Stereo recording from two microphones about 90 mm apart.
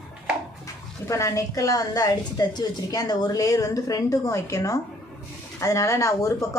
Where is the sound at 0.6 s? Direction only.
35° left (ahead or behind).